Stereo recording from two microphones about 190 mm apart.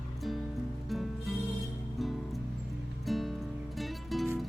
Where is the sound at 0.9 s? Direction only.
Centre (ahead or behind).